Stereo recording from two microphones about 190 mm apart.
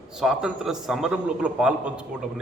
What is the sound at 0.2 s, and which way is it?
A man's voice, centre (ahead or behind).